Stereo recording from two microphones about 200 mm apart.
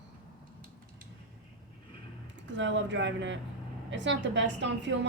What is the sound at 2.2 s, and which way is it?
A woman's voice, 65° right (ahead or behind).